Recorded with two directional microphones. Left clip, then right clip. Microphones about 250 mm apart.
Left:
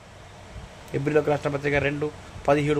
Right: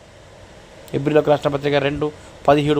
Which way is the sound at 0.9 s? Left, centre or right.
Right.